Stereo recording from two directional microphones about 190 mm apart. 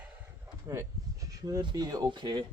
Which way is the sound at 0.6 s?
15° right (ahead or behind).